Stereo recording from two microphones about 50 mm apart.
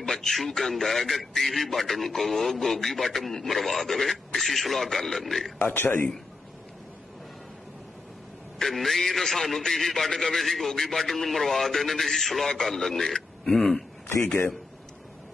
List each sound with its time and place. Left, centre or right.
0.0 s a man's voice: centre
5.6 s a man's voice: left
8.5 s a man's voice: centre